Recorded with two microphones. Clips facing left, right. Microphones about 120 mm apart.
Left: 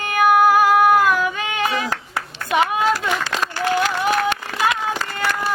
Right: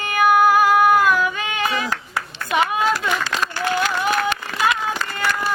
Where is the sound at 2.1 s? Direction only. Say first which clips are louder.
Left 2 dB; 45° left (ahead or behind).